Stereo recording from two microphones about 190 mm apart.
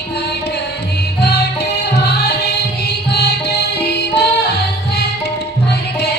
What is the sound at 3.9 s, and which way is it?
Music, 60° left (ahead or behind).